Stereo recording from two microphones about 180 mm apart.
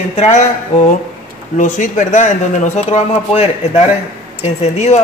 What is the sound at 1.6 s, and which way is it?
Speech, 45° left (ahead or behind).